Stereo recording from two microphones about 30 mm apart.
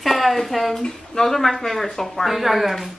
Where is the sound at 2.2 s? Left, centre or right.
Centre.